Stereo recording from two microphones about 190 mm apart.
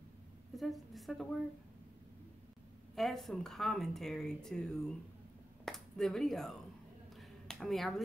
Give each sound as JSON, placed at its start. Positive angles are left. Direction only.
{"t": 0.6, "sound": "speech", "side_deg": 0}
{"t": 3.0, "sound": "speech", "side_deg": 0}
{"t": 7.2, "sound": "a sound", "side_deg": 0}